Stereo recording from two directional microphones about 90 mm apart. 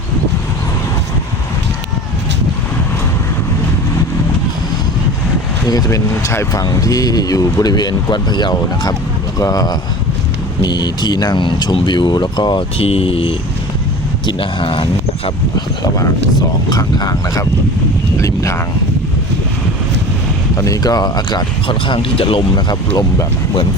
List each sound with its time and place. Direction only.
5.6 s speech: 45° left (ahead or behind)
9.4 s speech: 40° left (ahead or behind); by 12.6 s 60° left (ahead or behind)
12.8 s speech: 90° left
14.3 s speech: 75° left (ahead or behind)
15.5 s speech: 45° left (ahead or behind)
18.2 s speech: 35° left (ahead or behind)
20.6 s speech: 40° left (ahead or behind); by 22.4 s 85° left